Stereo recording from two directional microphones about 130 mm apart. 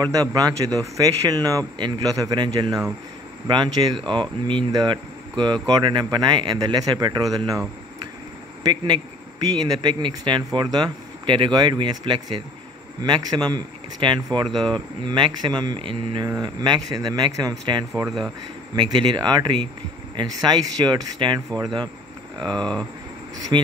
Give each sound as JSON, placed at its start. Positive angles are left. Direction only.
{"t": 0.0, "sound": "a man's voice", "side_deg": -30}
{"t": 8.6, "sound": "a man's voice", "side_deg": -35}
{"t": 22.4, "sound": "speech", "side_deg": 5}
{"t": 23.5, "sound": "a man's voice", "side_deg": -35}